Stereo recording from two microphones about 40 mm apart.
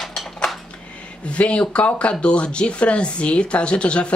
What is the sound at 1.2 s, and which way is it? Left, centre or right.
Speech, left.